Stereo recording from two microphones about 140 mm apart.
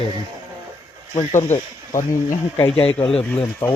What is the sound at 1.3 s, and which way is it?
Speech, 65° left (ahead or behind).